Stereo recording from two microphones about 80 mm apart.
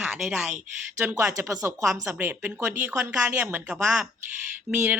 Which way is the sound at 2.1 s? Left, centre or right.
Right.